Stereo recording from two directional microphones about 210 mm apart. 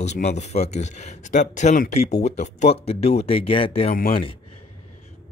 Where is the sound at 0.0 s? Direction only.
35° left (ahead or behind).